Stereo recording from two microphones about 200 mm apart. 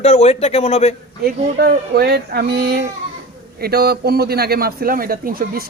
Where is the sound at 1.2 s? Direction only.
50° right (ahead or behind).